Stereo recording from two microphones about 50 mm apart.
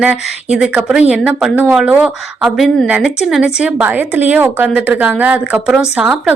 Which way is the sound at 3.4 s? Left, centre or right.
Right.